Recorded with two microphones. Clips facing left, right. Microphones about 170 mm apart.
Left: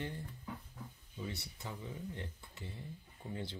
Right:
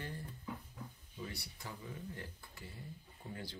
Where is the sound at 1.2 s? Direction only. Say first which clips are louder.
Left 3 dB; 20° left (ahead or behind).